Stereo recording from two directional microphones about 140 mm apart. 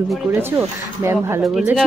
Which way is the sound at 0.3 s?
15° right (ahead or behind).